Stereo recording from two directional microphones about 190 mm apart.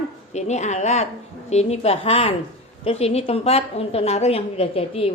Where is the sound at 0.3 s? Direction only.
35° left (ahead or behind).